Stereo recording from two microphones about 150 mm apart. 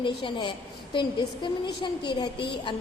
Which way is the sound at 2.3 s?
90° left.